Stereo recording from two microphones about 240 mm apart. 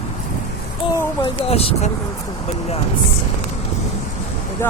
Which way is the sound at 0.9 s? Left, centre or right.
Left.